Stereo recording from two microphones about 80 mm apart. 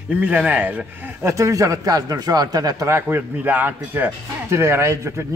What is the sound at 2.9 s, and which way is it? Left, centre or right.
Speech, right.